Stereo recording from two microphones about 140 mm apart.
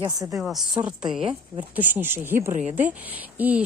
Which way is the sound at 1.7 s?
15° right (ahead or behind).